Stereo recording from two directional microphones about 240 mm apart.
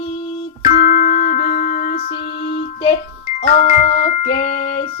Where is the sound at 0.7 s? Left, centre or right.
Left.